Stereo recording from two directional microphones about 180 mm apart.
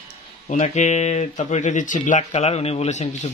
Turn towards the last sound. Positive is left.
turn(degrees=40)  # may be behind; listen again after turning